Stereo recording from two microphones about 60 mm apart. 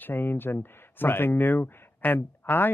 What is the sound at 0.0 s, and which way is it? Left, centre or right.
Speech, left.